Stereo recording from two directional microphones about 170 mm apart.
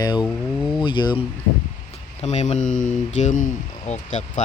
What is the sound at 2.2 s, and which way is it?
Speech, 40° left (ahead or behind).